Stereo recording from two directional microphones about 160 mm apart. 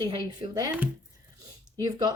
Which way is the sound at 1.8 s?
25° right (ahead or behind).